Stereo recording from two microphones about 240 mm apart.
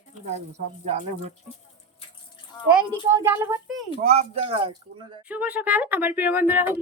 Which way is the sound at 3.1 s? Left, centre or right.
Centre.